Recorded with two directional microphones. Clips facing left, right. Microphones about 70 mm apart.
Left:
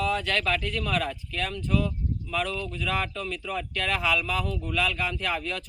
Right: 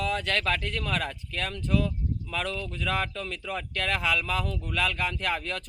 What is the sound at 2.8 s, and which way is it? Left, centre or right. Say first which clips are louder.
Speech: even; right.